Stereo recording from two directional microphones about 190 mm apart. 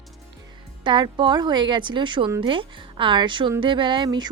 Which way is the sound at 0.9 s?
25° right (ahead or behind).